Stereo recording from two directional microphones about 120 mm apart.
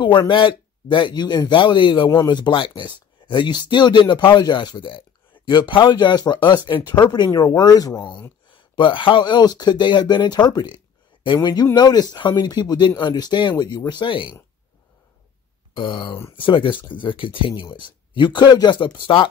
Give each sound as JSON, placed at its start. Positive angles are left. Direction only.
{"t": 0.3, "sound": "speech", "side_deg": 45}
{"t": 15.7, "sound": "speech", "side_deg": 40}